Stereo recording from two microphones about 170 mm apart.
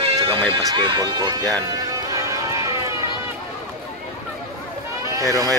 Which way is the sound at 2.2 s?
20° right (ahead or behind).